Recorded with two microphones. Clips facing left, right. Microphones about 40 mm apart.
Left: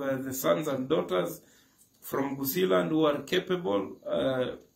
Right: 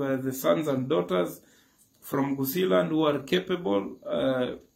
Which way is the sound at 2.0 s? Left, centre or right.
Centre.